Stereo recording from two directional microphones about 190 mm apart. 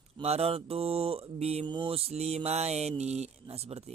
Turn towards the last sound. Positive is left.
turn(degrees=-35)  # may be behind; listen again after turning